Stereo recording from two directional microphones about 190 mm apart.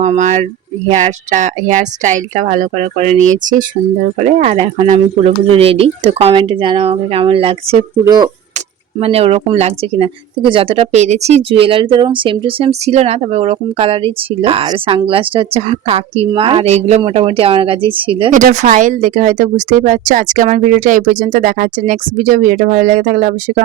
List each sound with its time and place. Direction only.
0.0 s speech: 40° right (ahead or behind)
8.0 s speech: 20° right (ahead or behind)
9.0 s speech: 30° right (ahead or behind)
18.3 s speech: 40° right (ahead or behind)